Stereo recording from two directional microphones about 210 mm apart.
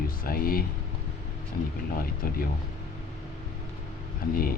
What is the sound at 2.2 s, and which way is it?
Speech, 45° left (ahead or behind).